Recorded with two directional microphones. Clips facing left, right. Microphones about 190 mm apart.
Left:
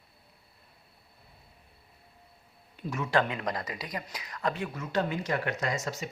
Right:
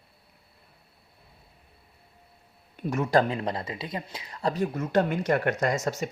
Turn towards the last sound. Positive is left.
turn(degrees=-50)  # may be behind; listen again after turning